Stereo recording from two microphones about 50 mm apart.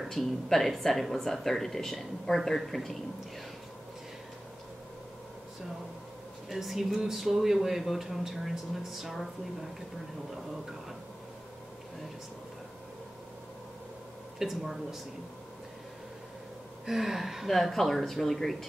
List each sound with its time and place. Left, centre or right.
0.0 s speech: centre
6.5 s speech: centre
14.4 s speech: centre
16.8 s speech: centre